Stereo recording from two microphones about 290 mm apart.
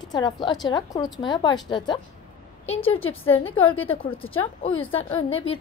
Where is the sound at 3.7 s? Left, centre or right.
Centre.